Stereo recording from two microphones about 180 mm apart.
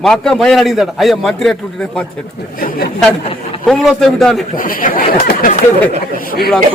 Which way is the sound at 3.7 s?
Centre (ahead or behind).